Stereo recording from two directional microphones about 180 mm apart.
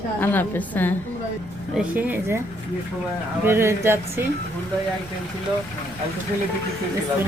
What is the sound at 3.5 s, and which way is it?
Speech, 15° right (ahead or behind).